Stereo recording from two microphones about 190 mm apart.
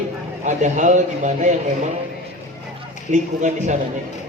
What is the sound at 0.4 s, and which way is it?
A man's voice, 40° right (ahead or behind).